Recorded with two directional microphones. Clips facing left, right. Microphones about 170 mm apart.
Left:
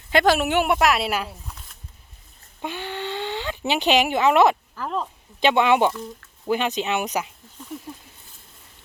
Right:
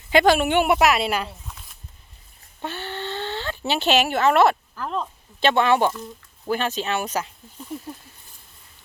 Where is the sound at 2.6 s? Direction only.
15° left (ahead or behind).